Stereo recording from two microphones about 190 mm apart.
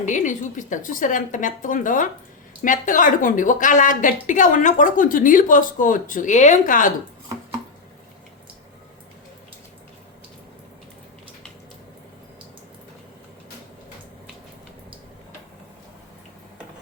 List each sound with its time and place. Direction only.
0.0 s speech: 40° left (ahead or behind)